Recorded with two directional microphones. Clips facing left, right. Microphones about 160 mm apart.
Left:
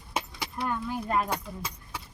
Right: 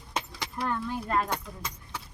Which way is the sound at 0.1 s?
5° left (ahead or behind).